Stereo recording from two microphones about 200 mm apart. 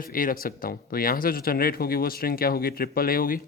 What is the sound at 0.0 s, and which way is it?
Speech, 45° left (ahead or behind).